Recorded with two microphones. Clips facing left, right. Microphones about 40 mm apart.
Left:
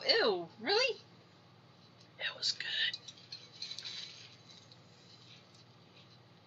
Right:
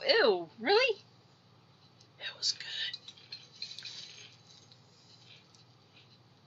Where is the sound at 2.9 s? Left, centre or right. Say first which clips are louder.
Right 1 dB; right.